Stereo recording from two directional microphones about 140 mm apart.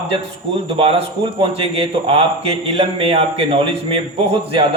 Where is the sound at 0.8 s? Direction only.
45° right (ahead or behind).